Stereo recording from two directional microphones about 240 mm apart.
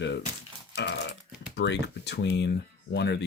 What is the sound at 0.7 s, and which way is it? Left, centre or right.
Burping, left.